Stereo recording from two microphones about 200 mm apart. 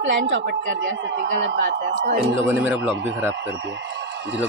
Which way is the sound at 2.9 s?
65° right (ahead or behind).